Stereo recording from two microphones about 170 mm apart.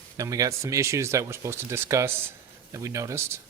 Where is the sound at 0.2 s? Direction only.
20° right (ahead or behind).